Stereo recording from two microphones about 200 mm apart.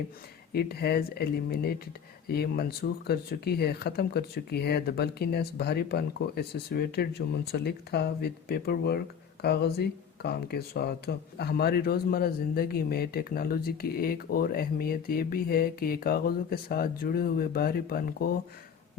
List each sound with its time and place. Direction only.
0.5 s speech: 50° left (ahead or behind)